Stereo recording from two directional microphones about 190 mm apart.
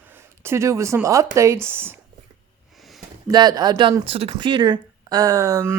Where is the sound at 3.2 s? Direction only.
20° right (ahead or behind).